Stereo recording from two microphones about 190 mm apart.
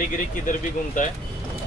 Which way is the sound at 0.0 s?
45° left (ahead or behind).